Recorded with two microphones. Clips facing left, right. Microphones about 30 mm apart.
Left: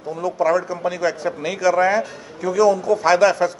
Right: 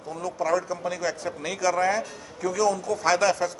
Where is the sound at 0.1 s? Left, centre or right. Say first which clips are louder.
Left 7 dB; centre.